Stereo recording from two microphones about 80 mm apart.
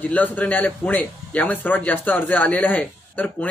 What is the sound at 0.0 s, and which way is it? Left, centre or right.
A man's voice, left.